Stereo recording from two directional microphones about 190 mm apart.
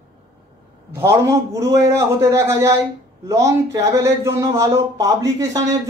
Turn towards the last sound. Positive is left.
turn(degrees=-20)  # may be behind; listen again after turning